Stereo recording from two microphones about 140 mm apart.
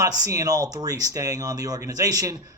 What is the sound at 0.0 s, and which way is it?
Speech, 25° right (ahead or behind).